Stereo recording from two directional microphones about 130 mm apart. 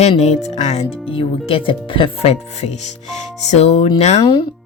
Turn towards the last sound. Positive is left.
turn(degrees=55)  # may be behind; listen again after turning